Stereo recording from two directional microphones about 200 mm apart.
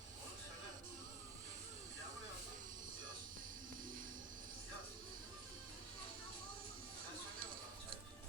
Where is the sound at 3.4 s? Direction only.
40° right (ahead or behind).